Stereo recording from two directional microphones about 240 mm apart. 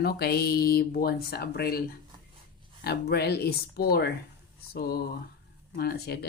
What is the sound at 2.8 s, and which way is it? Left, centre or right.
Speech, left.